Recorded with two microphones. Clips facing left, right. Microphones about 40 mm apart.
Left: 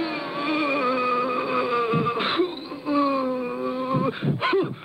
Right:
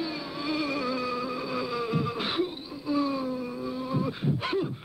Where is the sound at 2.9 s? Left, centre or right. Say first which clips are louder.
Left 6 dB; left.